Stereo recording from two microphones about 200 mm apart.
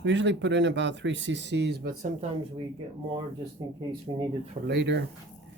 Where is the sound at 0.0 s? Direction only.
65° right (ahead or behind).